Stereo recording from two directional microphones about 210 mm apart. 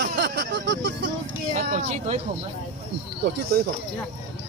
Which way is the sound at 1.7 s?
35° right (ahead or behind).